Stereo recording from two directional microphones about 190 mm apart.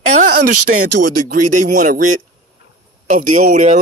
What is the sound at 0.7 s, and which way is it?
Speech, 55° right (ahead or behind).